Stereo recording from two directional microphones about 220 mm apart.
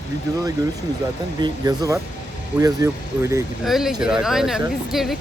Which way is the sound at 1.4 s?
15° right (ahead or behind).